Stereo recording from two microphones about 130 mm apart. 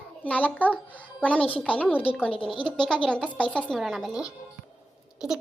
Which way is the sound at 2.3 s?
40° left (ahead or behind).